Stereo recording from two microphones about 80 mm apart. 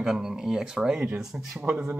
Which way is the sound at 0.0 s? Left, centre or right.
Centre.